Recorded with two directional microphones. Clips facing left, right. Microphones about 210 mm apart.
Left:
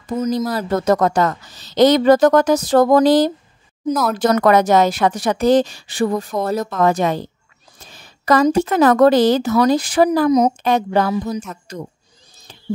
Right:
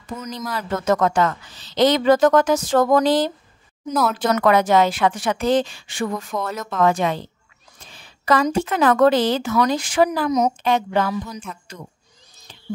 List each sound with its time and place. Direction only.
0.0 s a woman's voice: 35° left (ahead or behind)